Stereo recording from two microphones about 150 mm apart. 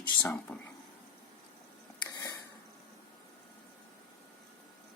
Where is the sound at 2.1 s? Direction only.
20° left (ahead or behind).